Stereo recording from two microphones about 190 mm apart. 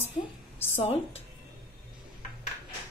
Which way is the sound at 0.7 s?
30° left (ahead or behind).